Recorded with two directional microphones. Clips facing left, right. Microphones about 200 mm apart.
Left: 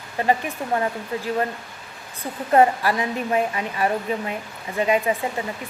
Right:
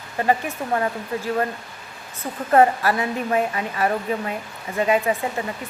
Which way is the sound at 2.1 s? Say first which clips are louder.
Right 1 dB; 15° left (ahead or behind).